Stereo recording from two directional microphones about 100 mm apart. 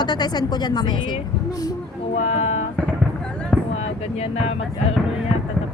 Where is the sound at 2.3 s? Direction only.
90° left.